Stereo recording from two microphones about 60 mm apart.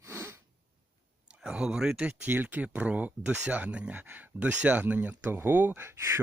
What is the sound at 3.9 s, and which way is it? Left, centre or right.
Speech, right.